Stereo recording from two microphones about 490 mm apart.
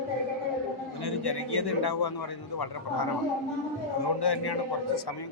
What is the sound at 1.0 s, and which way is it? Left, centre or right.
A man's voice, left.